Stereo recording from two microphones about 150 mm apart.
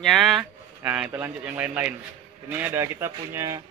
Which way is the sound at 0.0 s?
Centre (ahead or behind).